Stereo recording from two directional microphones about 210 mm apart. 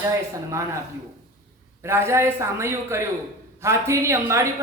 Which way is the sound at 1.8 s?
10° right (ahead or behind).